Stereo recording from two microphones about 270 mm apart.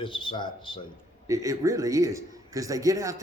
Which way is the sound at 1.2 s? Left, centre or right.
Centre.